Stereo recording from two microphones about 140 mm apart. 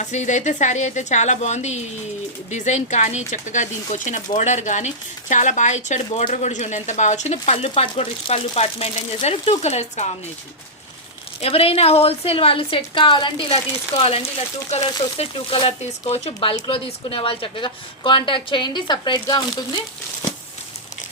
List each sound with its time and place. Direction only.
0.0 s a woman's voice: 60° left (ahead or behind)
11.3 s a woman's voice: 45° left (ahead or behind)